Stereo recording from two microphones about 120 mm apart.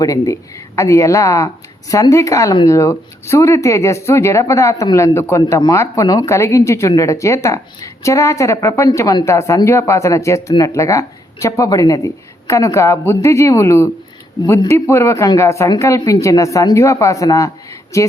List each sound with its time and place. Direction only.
0.0 s speech: 30° left (ahead or behind)